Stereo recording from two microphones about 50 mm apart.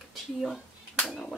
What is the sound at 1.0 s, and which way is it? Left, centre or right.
Speech, centre.